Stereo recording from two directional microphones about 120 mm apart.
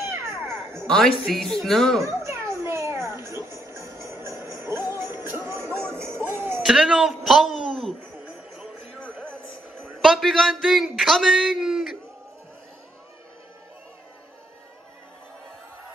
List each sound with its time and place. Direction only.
0.8 s speech: 5° left (ahead or behind)
2.0 s music: 25° right (ahead or behind)
6.6 s a sound: 5° right (ahead or behind)
10.0 s a man's voice: centre (ahead or behind)